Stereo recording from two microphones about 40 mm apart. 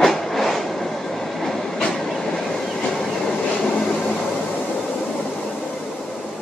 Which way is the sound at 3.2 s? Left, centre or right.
Left.